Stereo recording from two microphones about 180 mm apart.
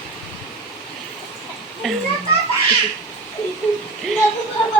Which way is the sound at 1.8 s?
Centre (ahead or behind).